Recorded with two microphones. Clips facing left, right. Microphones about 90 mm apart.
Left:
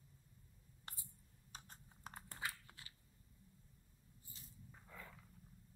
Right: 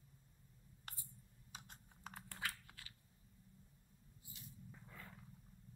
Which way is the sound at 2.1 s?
25° left (ahead or behind).